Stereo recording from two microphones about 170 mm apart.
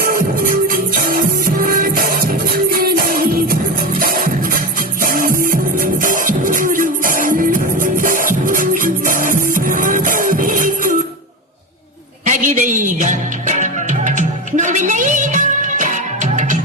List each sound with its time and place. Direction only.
0.0 s music: 60° right (ahead or behind)
12.2 s music: 45° right (ahead or behind)